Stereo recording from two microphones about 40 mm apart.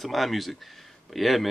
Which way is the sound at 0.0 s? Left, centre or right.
Centre.